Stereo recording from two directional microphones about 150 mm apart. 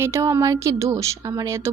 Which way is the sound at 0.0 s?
20° right (ahead or behind).